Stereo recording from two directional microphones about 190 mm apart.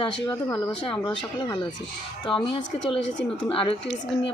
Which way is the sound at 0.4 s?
15° left (ahead or behind).